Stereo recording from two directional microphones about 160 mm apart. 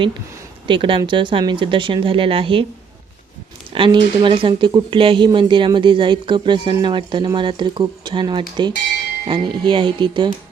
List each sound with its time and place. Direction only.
0.7 s speech: 35° right (ahead or behind)
3.7 s speech: 30° right (ahead or behind)